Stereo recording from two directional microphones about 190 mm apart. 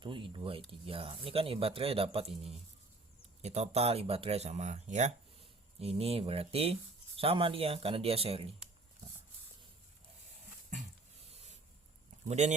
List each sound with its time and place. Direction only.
0.0 s speech: 25° right (ahead or behind)
11.3 s a sound: 35° right (ahead or behind)
12.3 s speech: 35° right (ahead or behind)